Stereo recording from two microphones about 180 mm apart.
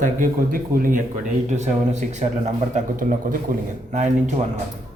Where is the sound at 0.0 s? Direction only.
50° right (ahead or behind).